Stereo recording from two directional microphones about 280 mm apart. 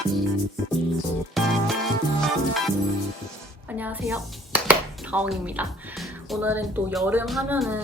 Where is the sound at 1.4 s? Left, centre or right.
Centre.